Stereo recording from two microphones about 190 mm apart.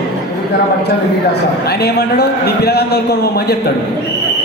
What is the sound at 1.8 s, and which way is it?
Speech, 60° left (ahead or behind).